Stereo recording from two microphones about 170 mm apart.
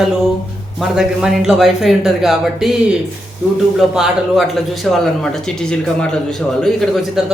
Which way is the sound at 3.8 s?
Centre (ahead or behind).